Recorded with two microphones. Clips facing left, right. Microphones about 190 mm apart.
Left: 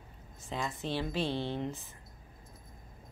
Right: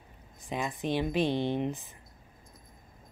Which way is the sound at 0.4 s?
15° right (ahead or behind).